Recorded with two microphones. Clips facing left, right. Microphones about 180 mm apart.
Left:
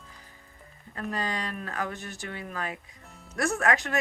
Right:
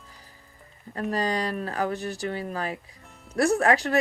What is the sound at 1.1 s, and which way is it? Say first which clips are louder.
Speech: right 6 dB; 35° right (ahead or behind).